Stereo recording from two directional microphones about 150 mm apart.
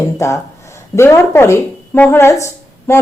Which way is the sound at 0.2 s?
20° left (ahead or behind).